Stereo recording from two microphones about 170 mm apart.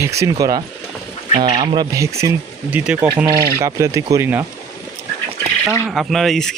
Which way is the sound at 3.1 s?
20° right (ahead or behind).